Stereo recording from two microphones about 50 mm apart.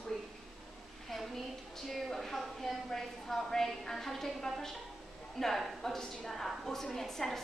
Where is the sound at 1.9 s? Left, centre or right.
Centre.